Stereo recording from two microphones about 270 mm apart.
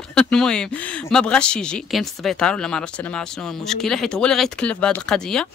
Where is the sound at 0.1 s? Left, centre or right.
Centre.